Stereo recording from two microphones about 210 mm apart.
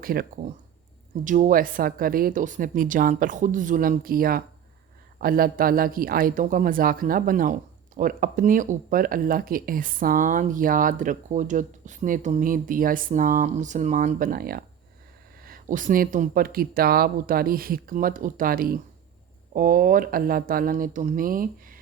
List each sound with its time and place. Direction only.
0.0 s speech: 45° right (ahead or behind)